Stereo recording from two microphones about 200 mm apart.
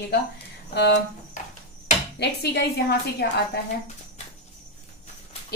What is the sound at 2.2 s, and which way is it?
A woman's voice, 55° left (ahead or behind).